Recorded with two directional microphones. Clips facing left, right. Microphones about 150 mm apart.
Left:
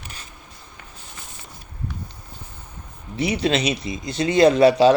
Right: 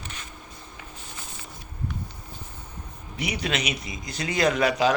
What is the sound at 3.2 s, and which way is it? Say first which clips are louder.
Speech: left 8 dB; 30° left (ahead or behind).